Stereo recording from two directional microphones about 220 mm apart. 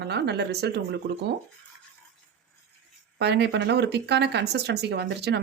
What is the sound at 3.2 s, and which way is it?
Speech, 50° right (ahead or behind).